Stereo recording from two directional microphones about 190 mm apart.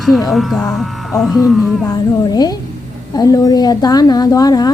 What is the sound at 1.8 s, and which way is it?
A woman's voice, 20° left (ahead or behind).